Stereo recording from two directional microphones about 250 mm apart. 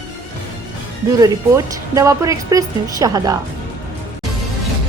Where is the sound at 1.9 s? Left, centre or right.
Centre.